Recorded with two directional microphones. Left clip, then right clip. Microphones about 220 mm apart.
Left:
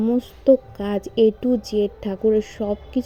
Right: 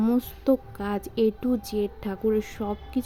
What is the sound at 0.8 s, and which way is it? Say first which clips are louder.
Speech: left 5 dB; 5° left (ahead or behind).